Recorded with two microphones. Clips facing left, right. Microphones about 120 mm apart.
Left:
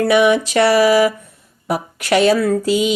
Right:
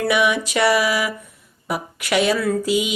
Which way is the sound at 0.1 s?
30° left (ahead or behind).